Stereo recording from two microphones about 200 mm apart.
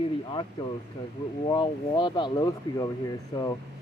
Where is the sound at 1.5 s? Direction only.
20° left (ahead or behind).